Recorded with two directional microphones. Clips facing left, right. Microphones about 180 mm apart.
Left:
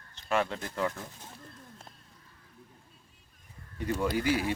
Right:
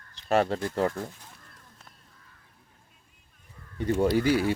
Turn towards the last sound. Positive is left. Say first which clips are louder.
# right 5 dB
turn(degrees=-35)  # may be behind; listen again after turning